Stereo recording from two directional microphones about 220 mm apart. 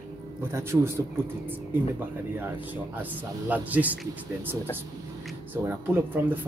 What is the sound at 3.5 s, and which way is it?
Speech, 5° right (ahead or behind).